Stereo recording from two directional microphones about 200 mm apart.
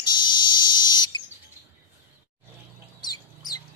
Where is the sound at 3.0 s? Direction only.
20° left (ahead or behind).